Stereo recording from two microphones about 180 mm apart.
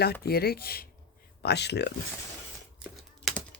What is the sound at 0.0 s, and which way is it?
Speech, 60° left (ahead or behind).